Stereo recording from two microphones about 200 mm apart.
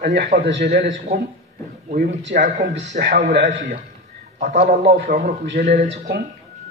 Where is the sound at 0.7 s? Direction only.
35° right (ahead or behind).